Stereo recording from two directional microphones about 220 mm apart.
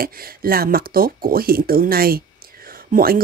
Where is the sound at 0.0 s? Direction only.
40° right (ahead or behind).